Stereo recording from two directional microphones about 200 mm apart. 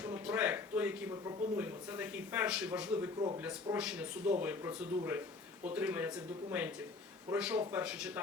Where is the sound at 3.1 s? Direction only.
20° right (ahead or behind).